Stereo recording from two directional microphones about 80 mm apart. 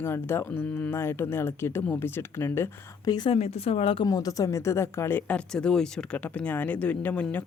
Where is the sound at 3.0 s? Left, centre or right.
Left.